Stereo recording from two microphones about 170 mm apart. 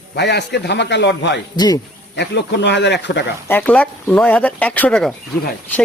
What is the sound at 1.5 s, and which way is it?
Speech, 25° left (ahead or behind).